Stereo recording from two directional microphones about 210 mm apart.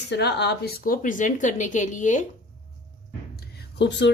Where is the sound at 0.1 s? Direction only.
55° left (ahead or behind); by 2.2 s 35° left (ahead or behind).